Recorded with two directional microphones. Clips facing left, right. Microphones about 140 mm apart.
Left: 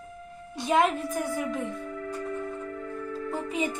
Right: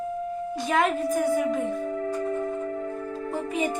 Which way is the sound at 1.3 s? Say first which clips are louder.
Right 6 dB; 25° right (ahead or behind).